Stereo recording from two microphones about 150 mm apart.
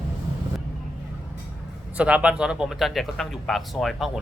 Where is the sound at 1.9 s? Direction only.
10° right (ahead or behind).